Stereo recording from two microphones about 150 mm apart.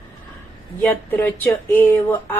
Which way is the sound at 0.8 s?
15° left (ahead or behind).